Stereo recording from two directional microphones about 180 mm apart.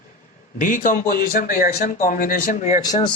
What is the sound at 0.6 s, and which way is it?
A man's voice, 50° left (ahead or behind).